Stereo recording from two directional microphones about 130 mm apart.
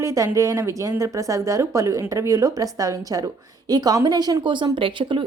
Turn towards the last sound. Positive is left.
turn(degrees=-40)  # may be behind; listen again after turning